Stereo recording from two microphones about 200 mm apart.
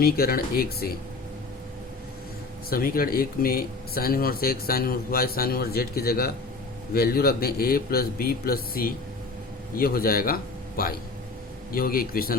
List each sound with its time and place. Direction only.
0.0 s speech: 50° left (ahead or behind)
2.6 s speech: 45° left (ahead or behind)